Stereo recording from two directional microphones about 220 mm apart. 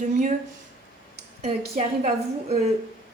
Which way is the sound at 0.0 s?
35° right (ahead or behind).